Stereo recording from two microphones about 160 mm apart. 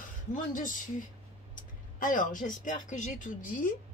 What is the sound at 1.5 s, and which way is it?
Speech, 55° left (ahead or behind).